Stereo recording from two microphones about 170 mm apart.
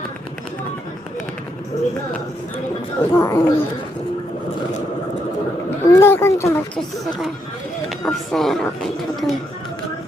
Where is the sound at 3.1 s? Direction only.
15° left (ahead or behind).